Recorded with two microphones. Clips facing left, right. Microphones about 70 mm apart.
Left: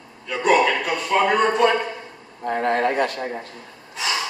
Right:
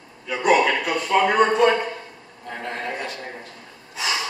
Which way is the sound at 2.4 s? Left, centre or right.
Left.